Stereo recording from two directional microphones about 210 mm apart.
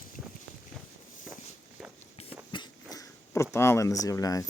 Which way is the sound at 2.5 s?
20° left (ahead or behind).